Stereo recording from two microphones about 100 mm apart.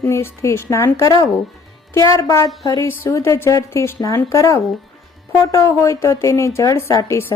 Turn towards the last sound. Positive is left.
turn(degrees=30)  # may be behind; listen again after turning